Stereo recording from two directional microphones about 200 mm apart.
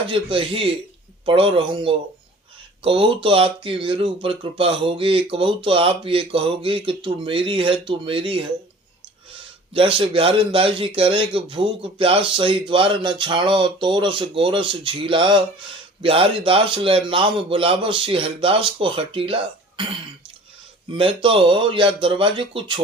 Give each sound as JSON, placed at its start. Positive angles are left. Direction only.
{"t": 0.1, "sound": "speech", "side_deg": -25}
{"t": 9.7, "sound": "speech", "side_deg": -25}
{"t": 20.9, "sound": "speech", "side_deg": -25}